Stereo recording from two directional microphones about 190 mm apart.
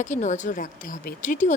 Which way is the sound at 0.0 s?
40° left (ahead or behind).